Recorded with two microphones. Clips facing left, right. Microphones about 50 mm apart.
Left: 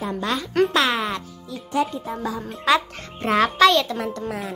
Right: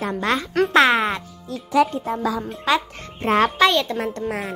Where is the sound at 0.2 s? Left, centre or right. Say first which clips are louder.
Even; right.